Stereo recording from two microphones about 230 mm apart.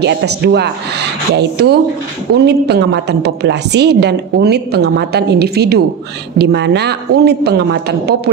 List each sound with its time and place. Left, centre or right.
0.0 s a woman's voice: right